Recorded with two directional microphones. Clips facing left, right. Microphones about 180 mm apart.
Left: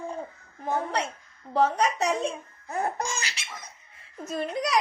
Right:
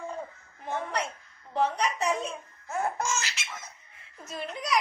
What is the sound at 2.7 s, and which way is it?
Laughter, 35° left (ahead or behind).